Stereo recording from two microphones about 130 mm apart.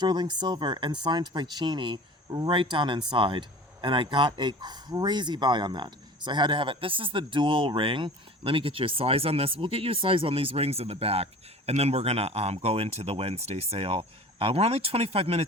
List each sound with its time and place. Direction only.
0.0 s speech: 35° right (ahead or behind); by 15.4 s 50° right (ahead or behind)